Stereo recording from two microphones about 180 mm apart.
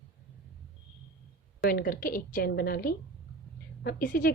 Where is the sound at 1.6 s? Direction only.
55° left (ahead or behind).